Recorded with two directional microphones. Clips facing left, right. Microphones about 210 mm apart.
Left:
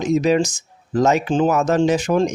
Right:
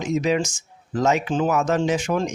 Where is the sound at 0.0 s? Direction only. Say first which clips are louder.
Left 5 dB; 35° left (ahead or behind).